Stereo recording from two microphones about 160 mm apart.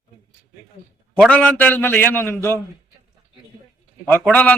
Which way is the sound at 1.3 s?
10° left (ahead or behind).